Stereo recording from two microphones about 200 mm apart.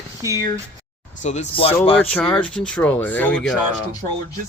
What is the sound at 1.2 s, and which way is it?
Speech, 35° left (ahead or behind).